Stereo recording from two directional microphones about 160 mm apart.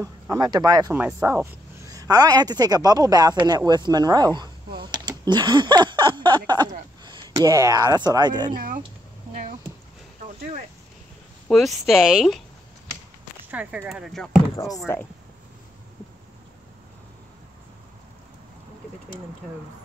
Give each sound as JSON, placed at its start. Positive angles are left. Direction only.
{"t": 0.0, "sound": "speech", "side_deg": -20}
{"t": 11.4, "sound": "speech", "side_deg": 0}
{"t": 13.5, "sound": "speech", "side_deg": -10}